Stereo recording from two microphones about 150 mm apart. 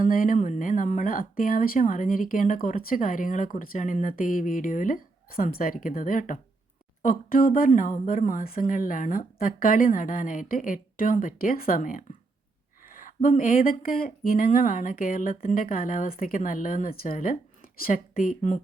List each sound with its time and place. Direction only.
0.0 s speech: 65° left (ahead or behind)